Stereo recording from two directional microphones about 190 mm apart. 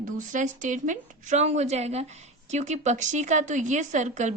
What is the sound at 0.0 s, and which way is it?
A woman's voice, 40° right (ahead or behind).